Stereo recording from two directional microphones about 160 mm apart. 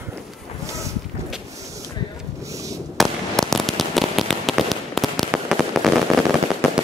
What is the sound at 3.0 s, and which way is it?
Fireworks, centre (ahead or behind).